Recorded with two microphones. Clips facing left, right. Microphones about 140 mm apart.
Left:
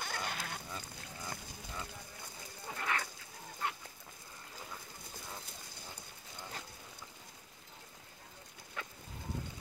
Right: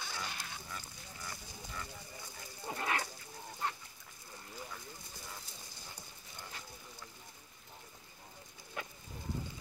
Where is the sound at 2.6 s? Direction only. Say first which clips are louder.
Right 2 dB; 25° right (ahead or behind).